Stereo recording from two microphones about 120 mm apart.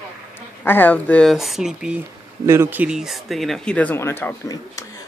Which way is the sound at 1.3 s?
Centre (ahead or behind).